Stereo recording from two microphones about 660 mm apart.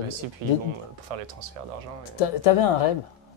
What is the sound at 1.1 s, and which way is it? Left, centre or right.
Speech, right.